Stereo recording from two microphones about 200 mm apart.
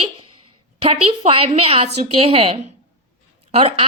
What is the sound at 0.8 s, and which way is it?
Speech, 30° right (ahead or behind).